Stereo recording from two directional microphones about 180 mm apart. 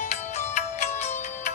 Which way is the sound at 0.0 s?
40° left (ahead or behind).